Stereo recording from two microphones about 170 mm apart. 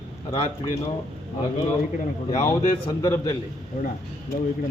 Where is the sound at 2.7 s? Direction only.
20° left (ahead or behind).